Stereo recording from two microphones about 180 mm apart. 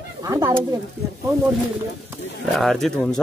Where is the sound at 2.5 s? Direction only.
Centre (ahead or behind).